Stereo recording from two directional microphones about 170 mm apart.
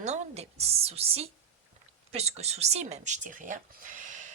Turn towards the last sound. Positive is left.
turn(degrees=-45)  # may be behind; listen again after turning